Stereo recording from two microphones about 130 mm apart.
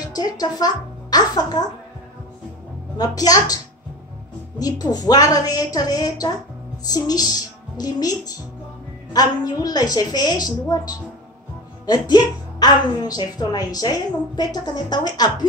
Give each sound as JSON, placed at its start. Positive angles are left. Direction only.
{"t": 0.0, "sound": "speech", "side_deg": 30}
{"t": 3.0, "sound": "a woman's voice", "side_deg": 30}
{"t": 4.6, "sound": "a woman's voice", "side_deg": 30}